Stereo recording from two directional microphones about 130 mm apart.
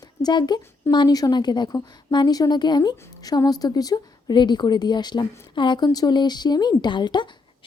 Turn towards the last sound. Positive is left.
turn(degrees=35)  # may be behind; listen again after turning